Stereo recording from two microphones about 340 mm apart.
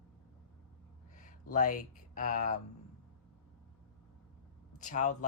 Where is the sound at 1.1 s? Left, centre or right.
Left.